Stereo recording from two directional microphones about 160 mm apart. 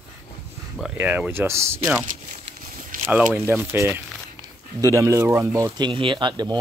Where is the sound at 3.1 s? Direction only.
10° right (ahead or behind).